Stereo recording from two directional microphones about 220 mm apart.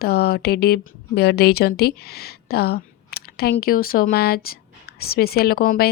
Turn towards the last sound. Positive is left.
turn(degrees=45)  # may be behind; listen again after turning